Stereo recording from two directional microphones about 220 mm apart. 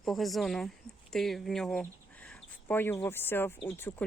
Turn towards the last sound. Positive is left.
turn(degrees=10)  # may be behind; listen again after turning